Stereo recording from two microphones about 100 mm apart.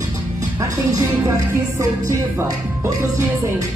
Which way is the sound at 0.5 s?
30° right (ahead or behind).